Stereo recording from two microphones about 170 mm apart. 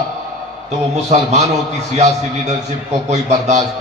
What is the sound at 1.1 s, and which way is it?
A man's voice, 40° right (ahead or behind).